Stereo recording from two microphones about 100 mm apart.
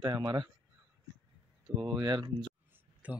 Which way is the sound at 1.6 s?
5° right (ahead or behind).